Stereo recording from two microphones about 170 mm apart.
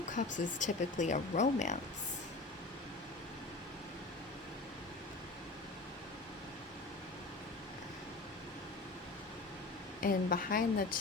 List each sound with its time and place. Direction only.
0.3 s speech: 45° left (ahead or behind)
10.0 s a woman's voice: 55° left (ahead or behind)